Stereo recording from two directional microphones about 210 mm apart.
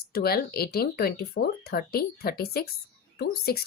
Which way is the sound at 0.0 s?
50° left (ahead or behind).